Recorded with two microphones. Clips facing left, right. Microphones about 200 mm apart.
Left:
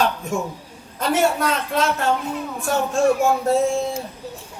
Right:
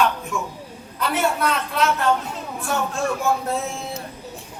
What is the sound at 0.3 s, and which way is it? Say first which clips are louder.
A man's voice: left 3 dB; 45° left (ahead or behind).